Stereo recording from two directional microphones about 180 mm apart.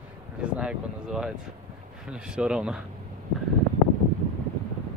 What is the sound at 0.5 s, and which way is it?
Speech, 5° right (ahead or behind).